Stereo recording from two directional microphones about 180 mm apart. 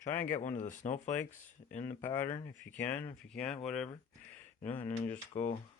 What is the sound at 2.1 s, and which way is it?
Speech, 45° left (ahead or behind).